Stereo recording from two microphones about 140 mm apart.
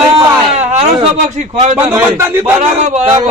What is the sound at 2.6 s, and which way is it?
Speech, 50° right (ahead or behind).